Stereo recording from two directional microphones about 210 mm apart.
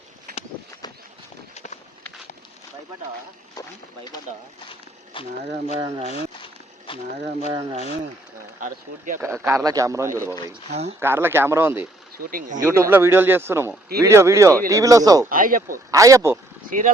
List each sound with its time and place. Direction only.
1.5 s walk: 30° left (ahead or behind)
5.4 s speech: 30° right (ahead or behind)
7.7 s speech: 30° right (ahead or behind)
9.1 s speech: 15° right (ahead or behind)
10.7 s speech: 30° right (ahead or behind)
11.0 s speech: 10° right (ahead or behind)
12.2 s speech: 40° right (ahead or behind)
12.6 s speech: 15° right (ahead or behind)
15.3 s speech: 40° right (ahead or behind)
15.9 s speech: 15° right (ahead or behind)
16.6 s speech: 40° right (ahead or behind)